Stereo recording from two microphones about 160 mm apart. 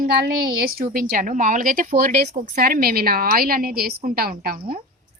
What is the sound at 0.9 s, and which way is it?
A woman's voice, 55° right (ahead or behind).